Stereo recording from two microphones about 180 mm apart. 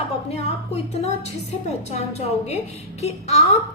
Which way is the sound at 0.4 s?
35° left (ahead or behind).